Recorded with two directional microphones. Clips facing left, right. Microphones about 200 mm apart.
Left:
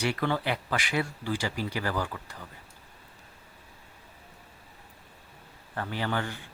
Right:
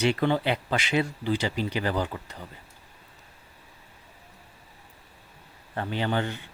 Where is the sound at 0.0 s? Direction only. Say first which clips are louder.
Right 5 dB; 20° right (ahead or behind).